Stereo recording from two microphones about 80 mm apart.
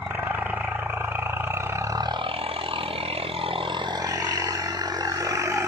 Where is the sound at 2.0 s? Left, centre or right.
Right.